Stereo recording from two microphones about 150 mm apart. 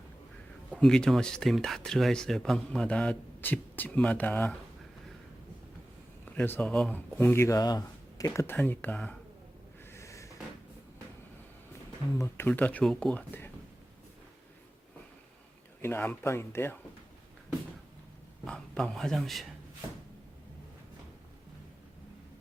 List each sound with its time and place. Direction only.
0.7 s speech: 5° left (ahead or behind)
6.3 s speech: 15° left (ahead or behind)
7.2 s speech: 15° left (ahead or behind)
9.9 s a sound: 20° left (ahead or behind)
12.1 s speech: 15° left (ahead or behind)
15.8 s speech: 15° left (ahead or behind)
18.4 s a man's voice: 5° left (ahead or behind)